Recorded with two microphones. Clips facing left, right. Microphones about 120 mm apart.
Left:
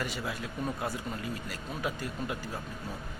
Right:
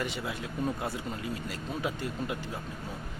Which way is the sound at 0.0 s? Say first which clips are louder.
Right 1 dB; 20° right (ahead or behind).